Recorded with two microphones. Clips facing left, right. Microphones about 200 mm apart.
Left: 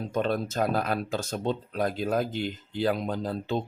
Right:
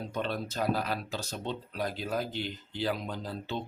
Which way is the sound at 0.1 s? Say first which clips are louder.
Left 8 dB; 45° left (ahead or behind).